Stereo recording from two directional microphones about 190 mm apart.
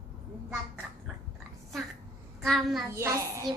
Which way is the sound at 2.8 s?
15° right (ahead or behind).